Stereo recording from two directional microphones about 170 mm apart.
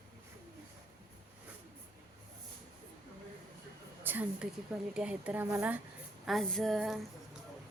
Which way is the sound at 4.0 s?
10° right (ahead or behind).